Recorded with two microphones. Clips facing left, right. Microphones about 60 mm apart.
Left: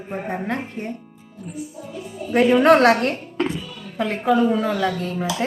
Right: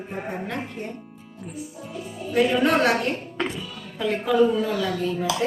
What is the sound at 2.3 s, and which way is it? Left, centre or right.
A woman's voice, left.